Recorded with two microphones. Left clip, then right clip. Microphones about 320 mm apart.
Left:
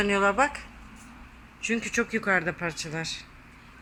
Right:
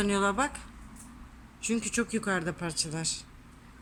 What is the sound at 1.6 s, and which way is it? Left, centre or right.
A child's voice, centre.